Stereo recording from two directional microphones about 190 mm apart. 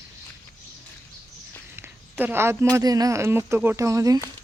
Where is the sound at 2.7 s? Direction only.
20° right (ahead or behind).